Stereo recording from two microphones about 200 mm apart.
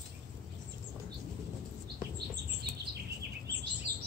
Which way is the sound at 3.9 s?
55° right (ahead or behind).